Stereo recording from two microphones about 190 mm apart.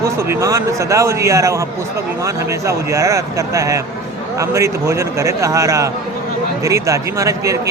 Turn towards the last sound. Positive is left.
turn(degrees=-15)  # may be behind; listen again after turning